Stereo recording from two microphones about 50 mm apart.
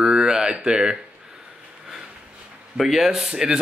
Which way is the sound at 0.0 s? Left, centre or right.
Centre.